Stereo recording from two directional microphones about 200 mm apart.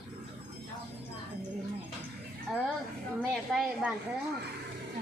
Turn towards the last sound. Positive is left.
turn(degrees=0)  # may be behind; listen again after turning